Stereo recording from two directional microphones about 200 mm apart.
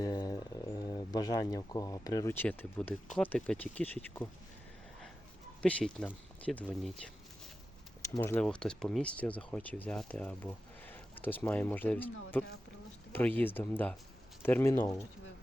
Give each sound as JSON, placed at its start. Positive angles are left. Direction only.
{"t": 0.0, "sound": "speech", "side_deg": 20}
{"t": 5.6, "sound": "speech", "side_deg": 5}